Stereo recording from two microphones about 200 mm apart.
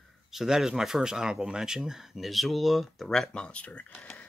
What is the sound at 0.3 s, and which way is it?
Speech, centre (ahead or behind).